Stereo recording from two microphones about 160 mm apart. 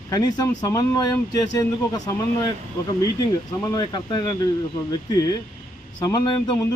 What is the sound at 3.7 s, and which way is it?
Speech, 25° left (ahead or behind).